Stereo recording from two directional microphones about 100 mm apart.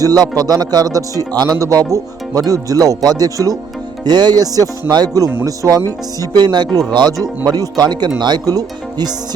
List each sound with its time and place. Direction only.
0.0 s speech: 40° right (ahead or behind)